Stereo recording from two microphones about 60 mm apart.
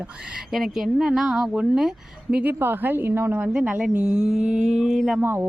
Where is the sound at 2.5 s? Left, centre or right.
Right.